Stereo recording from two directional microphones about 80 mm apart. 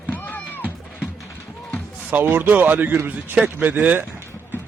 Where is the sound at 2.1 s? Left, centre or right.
Right.